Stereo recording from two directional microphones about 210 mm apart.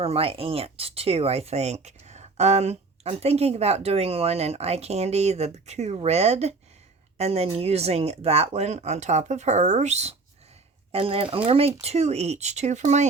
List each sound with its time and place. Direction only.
0.0 s speech: 25° right (ahead or behind)